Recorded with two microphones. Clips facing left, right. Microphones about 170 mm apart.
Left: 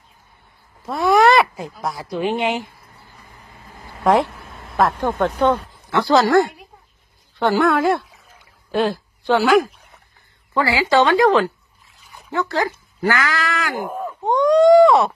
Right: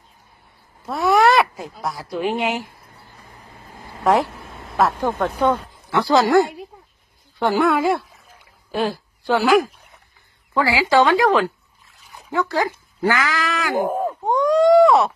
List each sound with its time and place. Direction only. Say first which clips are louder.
0.8 s speech: left 1 dB; 5° right (ahead or behind)
4.0 s speech: left 1 dB; 5° right (ahead or behind)
6.2 s speech: even; 20° right (ahead or behind)
7.3 s a woman's voice: left 1 dB; 5° right (ahead or behind)
13.8 s a sound: right 5 dB; 40° right (ahead or behind)
14.2 s a sound: left 3 dB; 5° right (ahead or behind)